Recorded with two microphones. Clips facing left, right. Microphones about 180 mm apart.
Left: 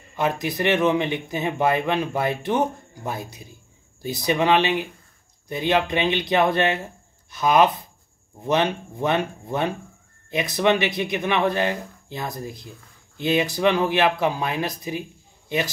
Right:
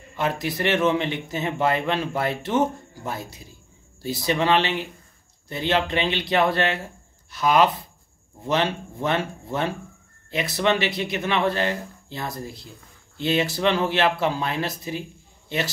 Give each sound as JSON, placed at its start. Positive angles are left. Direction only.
{"t": 0.1, "sound": "speech", "side_deg": 20}